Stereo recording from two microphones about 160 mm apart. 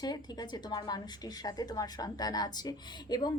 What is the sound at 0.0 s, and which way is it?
A woman's voice, 25° left (ahead or behind).